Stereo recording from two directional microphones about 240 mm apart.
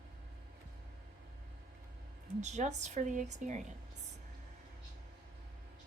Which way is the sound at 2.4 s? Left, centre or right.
Right.